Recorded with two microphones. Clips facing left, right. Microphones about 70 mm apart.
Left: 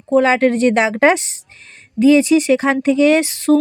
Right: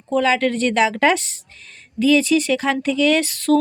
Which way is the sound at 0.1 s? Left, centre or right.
Left.